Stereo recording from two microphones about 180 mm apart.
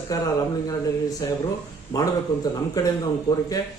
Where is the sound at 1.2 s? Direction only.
20° left (ahead or behind).